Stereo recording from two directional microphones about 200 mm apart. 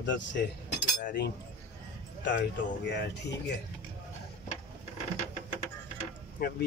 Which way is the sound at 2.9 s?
60° left (ahead or behind).